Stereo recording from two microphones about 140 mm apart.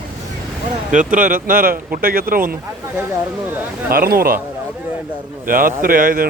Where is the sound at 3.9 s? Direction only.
90° right.